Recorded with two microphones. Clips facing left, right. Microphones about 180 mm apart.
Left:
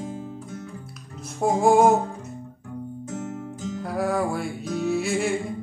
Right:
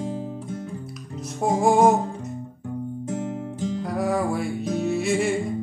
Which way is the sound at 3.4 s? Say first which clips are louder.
Right 4 dB; 30° right (ahead or behind).